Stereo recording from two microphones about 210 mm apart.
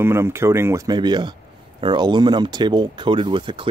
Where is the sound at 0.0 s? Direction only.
10° right (ahead or behind).